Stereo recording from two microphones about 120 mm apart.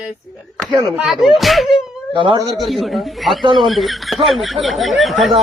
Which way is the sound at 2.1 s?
45° right (ahead or behind).